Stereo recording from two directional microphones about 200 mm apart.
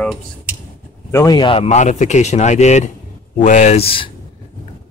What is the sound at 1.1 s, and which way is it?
Speech, 20° left (ahead or behind).